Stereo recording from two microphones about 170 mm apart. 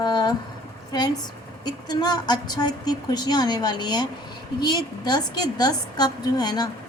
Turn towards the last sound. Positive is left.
turn(degrees=25)  # may be behind; listen again after turning